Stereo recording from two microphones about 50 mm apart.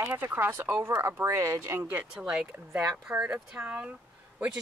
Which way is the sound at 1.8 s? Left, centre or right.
Right.